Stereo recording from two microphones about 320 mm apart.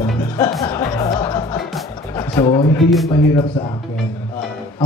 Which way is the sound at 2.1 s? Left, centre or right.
Centre.